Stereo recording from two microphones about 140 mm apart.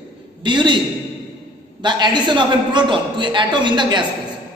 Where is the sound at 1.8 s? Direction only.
30° right (ahead or behind).